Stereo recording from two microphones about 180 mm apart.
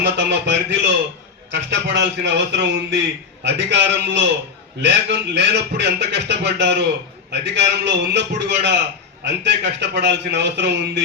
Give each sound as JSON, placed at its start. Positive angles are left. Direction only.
{"t": 0.0, "sound": "speech", "side_deg": -75}